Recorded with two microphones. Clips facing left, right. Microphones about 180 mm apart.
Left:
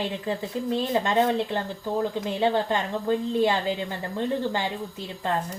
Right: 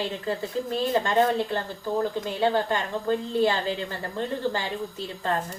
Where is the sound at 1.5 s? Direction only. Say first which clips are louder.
Even; 20° left (ahead or behind).